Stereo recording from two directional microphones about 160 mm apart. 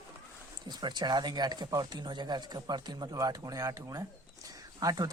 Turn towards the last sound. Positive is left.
turn(degrees=-25)  # may be behind; listen again after turning